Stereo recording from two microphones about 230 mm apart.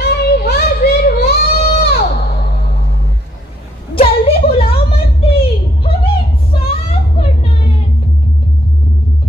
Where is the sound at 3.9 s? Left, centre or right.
Left.